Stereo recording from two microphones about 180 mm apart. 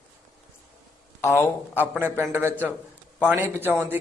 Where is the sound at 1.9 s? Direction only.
15° right (ahead or behind).